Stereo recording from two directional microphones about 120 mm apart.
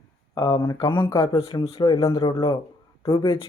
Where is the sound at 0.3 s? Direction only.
40° left (ahead or behind).